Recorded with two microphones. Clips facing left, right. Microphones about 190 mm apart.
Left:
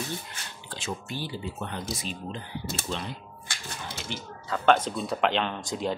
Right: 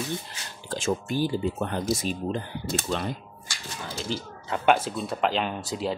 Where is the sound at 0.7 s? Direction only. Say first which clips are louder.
Right 8 dB; 45° right (ahead or behind).